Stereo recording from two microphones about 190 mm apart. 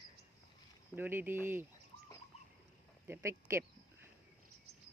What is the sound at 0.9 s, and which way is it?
Speech, 10° right (ahead or behind).